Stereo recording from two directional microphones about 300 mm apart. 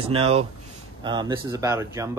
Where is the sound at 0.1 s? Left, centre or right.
Centre.